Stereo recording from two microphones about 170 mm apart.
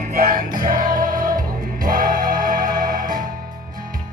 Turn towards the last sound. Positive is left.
turn(degrees=-55)  # may be behind; listen again after turning